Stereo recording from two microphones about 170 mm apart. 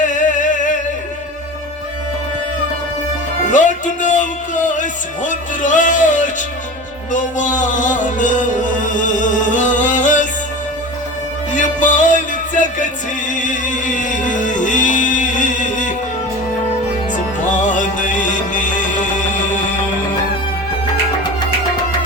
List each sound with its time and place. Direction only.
0.0 s a sound: 50° left (ahead or behind)
3.5 s music: 45° left (ahead or behind)
11.5 s music: 45° left (ahead or behind)
17.7 s music: 50° left (ahead or behind)